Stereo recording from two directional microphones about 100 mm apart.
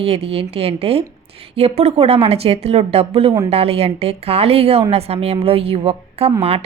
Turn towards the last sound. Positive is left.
turn(degrees=-85)